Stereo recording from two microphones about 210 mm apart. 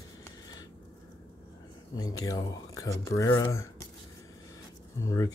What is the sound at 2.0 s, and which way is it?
Speech, 15° left (ahead or behind).